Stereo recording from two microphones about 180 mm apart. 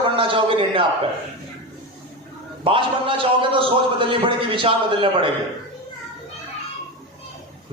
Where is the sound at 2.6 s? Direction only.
30° right (ahead or behind).